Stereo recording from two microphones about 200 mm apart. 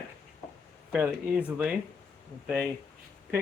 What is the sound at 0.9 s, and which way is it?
Speech, 10° right (ahead or behind).